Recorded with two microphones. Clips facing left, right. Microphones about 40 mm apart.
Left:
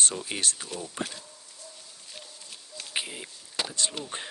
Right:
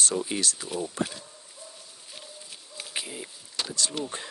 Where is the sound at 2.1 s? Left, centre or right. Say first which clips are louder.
Right 1 dB; centre.